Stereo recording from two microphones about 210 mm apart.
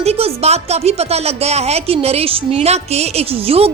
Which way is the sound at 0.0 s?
30° right (ahead or behind).